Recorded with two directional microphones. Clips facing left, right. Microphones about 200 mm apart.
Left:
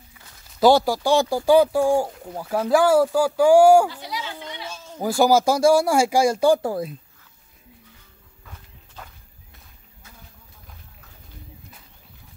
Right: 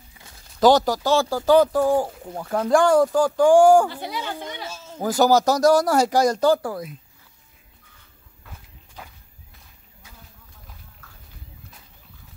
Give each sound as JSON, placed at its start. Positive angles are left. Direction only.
{"t": 0.6, "sound": "speech", "side_deg": 10}
{"t": 2.0, "sound": "speech", "side_deg": -5}
{"t": 3.9, "sound": "a woman's voice", "side_deg": -55}
{"t": 5.0, "sound": "speech", "side_deg": 10}
{"t": 6.6, "sound": "speech", "side_deg": 25}
{"t": 9.0, "sound": "walk", "side_deg": -10}